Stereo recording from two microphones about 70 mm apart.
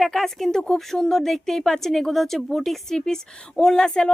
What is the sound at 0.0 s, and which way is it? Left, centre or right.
A woman's voice, centre.